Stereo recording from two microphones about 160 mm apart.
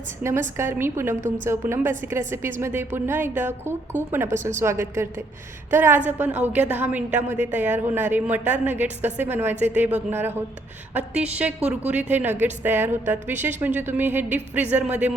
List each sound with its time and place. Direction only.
0.2 s a woman's voice: 15° right (ahead or behind)